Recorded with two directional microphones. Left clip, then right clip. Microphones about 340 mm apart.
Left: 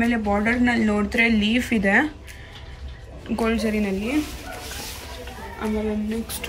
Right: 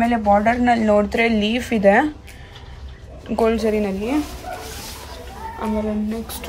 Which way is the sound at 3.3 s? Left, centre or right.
Right.